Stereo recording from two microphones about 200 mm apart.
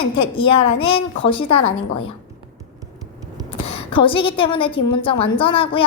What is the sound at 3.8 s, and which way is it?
A woman's voice, 25° left (ahead or behind).